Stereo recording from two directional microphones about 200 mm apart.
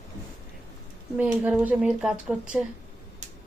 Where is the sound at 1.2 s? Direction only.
5° right (ahead or behind).